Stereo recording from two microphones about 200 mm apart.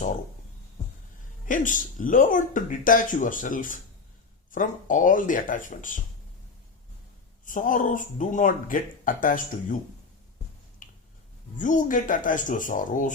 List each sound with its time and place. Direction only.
1.5 s speech: 40° left (ahead or behind)
7.4 s speech: 40° left (ahead or behind)
10.8 s finger snapping: 40° left (ahead or behind)
11.6 s speech: 40° left (ahead or behind)